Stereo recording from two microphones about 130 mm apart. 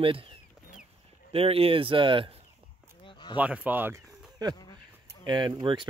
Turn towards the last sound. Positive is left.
turn(degrees=-35)  # may be behind; listen again after turning